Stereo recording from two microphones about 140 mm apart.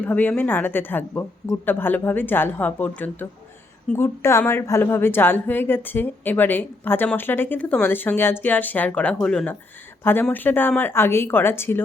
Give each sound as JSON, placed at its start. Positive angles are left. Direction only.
{"t": 0.0, "sound": "a woman's voice", "side_deg": 10}